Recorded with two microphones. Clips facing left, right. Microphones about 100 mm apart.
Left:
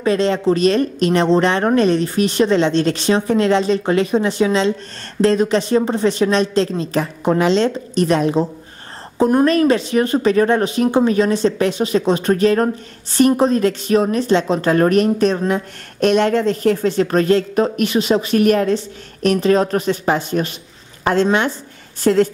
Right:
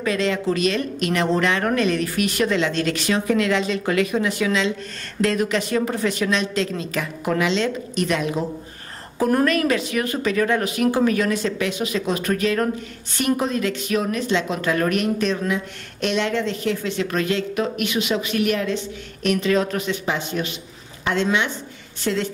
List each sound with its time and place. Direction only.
0.0 s a woman's voice: 30° left (ahead or behind)